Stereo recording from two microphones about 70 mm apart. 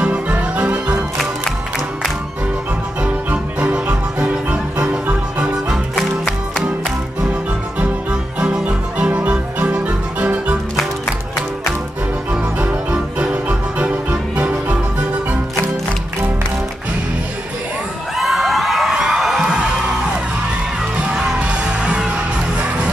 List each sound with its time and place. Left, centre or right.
0.0 s music: centre
3.0 s music: centre
5.9 s music: centre
7.8 s music: centre
12.3 s music: right
18.1 s music: centre
21.1 s music: centre